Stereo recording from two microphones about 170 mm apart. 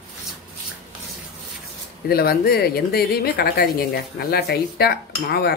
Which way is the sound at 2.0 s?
65° left (ahead or behind).